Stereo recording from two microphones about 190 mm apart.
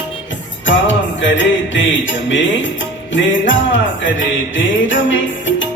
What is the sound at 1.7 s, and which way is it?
Music, 75° left (ahead or behind).